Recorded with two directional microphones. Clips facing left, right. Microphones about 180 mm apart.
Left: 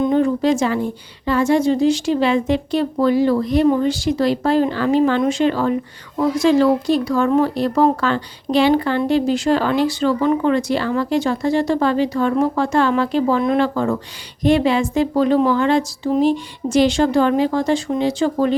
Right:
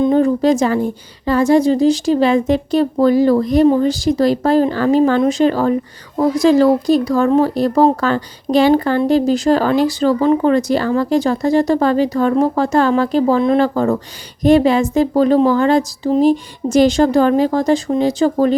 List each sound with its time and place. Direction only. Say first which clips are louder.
0.1 s a woman's voice: right 3 dB; 40° right (ahead or behind)